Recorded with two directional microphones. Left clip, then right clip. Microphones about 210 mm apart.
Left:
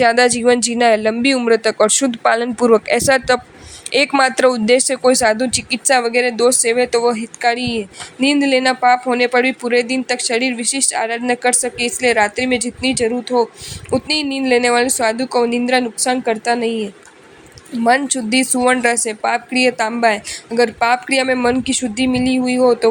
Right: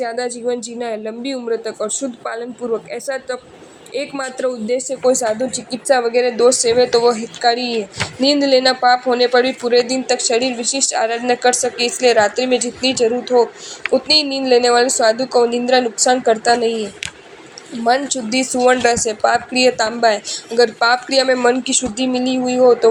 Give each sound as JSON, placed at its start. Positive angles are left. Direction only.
{"t": 0.0, "sound": "speech", "side_deg": 55}
{"t": 17.8, "sound": "speech", "side_deg": 55}